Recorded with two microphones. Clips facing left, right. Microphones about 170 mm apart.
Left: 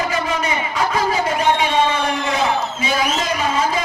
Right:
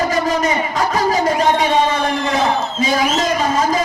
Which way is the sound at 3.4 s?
40° right (ahead or behind).